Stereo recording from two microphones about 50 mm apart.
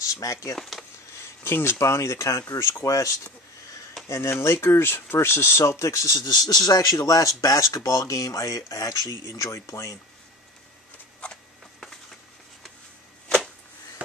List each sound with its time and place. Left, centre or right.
0.0 s speech: left
0.6 s speech: centre
1.4 s speech: left
4.1 s speech: left
4.6 s speech: left
11.8 s a sound: centre